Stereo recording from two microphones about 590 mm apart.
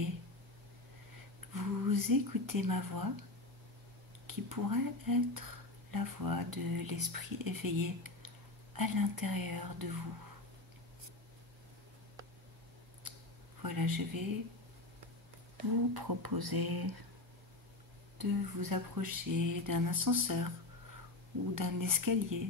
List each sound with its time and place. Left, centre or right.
1.5 s speech: right
4.3 s speech: right
13.6 s speech: right
15.9 s speech: right
18.1 s speech: right
21.5 s speech: right